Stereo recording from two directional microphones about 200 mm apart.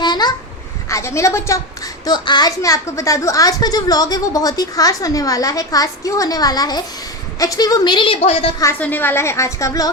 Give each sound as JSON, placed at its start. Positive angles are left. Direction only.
{"t": 0.0, "sound": "babbling", "side_deg": 20}
{"t": 0.9, "sound": "a woman's voice", "side_deg": 15}
{"t": 8.6, "sound": "a woman's voice", "side_deg": 10}